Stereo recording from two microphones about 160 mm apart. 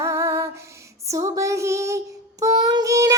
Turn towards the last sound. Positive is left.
turn(degrees=-20)  # may be behind; listen again after turning